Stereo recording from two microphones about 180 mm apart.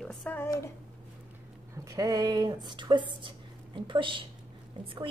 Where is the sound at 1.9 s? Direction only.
20° right (ahead or behind).